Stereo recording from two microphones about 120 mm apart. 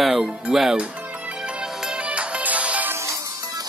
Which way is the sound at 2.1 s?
10° right (ahead or behind).